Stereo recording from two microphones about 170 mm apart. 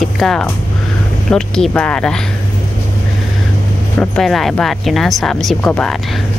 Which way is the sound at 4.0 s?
5° left (ahead or behind).